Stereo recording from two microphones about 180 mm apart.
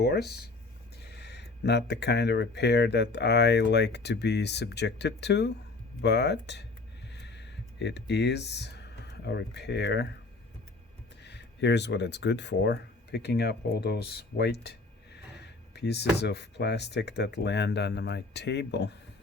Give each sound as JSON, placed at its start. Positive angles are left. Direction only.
{"t": 0.0, "sound": "speech", "side_deg": 65}
{"t": 7.1, "sound": "a sound", "side_deg": 70}
{"t": 9.2, "sound": "speech", "side_deg": 70}
{"t": 11.2, "sound": "speech", "side_deg": 70}